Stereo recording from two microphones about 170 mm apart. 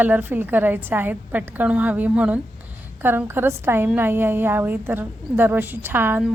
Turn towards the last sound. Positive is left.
turn(degrees=-10)  # may be behind; listen again after turning